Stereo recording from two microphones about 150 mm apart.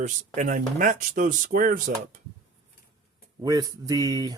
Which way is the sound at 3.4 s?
25° right (ahead or behind).